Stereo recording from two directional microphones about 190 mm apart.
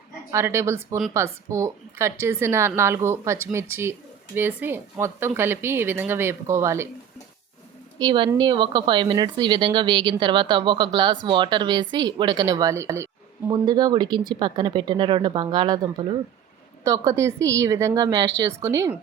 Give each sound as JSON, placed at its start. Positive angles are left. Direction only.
{"t": 0.3, "sound": "a woman's voice", "side_deg": -15}
{"t": 7.9, "sound": "a woman's voice", "side_deg": -25}